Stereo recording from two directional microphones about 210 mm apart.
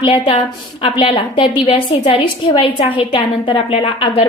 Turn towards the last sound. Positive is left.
turn(degrees=25)  # may be behind; listen again after turning